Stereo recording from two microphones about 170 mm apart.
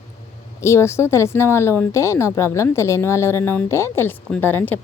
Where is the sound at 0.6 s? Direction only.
15° left (ahead or behind).